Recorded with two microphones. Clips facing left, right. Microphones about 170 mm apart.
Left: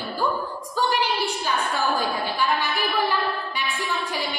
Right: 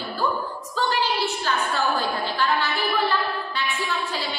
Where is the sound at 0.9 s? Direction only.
15° left (ahead or behind).